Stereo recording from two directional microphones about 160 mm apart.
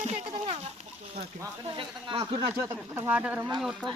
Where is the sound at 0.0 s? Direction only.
40° right (ahead or behind).